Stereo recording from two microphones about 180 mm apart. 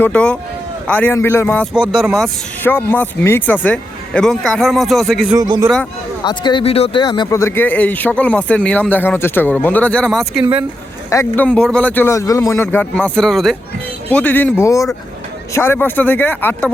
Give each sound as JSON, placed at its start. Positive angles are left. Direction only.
{"t": 0.0, "sound": "speech", "side_deg": 5}
{"t": 1.7, "sound": "speech", "side_deg": -5}
{"t": 2.6, "sound": "speech", "side_deg": 10}
{"t": 5.4, "sound": "a man's voice", "side_deg": -20}
{"t": 6.2, "sound": "speech", "side_deg": 25}
{"t": 11.1, "sound": "speech", "side_deg": 10}